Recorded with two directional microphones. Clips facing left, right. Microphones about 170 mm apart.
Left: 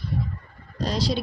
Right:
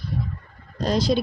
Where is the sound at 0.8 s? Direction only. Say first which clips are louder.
Right 4 dB; 50° right (ahead or behind).